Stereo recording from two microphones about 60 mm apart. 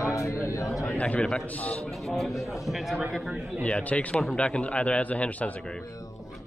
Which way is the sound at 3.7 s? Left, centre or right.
Left.